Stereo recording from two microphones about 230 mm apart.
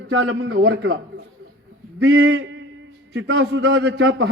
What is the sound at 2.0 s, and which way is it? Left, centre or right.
A man's voice, right.